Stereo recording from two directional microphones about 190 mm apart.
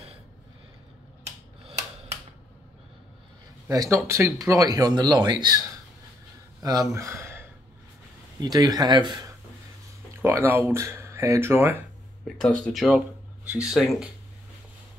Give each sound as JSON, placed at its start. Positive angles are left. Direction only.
{"t": 3.6, "sound": "speech", "side_deg": -15}
{"t": 6.6, "sound": "speech", "side_deg": -20}
{"t": 12.4, "sound": "speech", "side_deg": 5}